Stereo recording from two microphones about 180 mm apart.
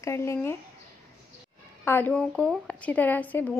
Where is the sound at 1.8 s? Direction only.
10° left (ahead or behind).